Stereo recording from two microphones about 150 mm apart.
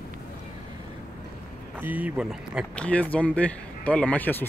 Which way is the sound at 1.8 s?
10° right (ahead or behind).